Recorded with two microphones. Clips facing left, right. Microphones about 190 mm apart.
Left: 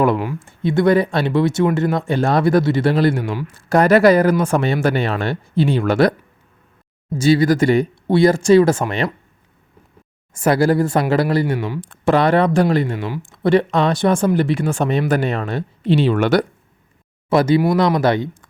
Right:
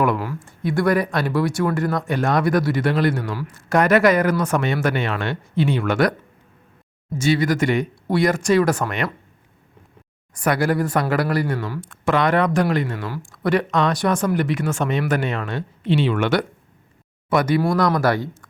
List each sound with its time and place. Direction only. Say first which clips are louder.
0.0 s speech: left 4 dB; 25° left (ahead or behind)
7.2 s speech: left 5 dB; 35° left (ahead or behind)
10.3 s speech: left 5 dB; 25° left (ahead or behind)
17.2 s speech: left 4 dB; 25° left (ahead or behind)